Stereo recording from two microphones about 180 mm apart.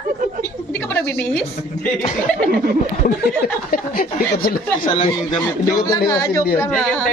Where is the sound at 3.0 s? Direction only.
50° left (ahead or behind).